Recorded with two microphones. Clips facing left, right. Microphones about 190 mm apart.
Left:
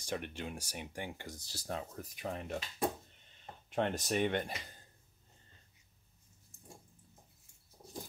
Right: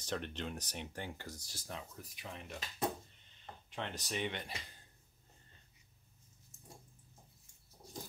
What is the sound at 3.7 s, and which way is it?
Speech, 50° left (ahead or behind).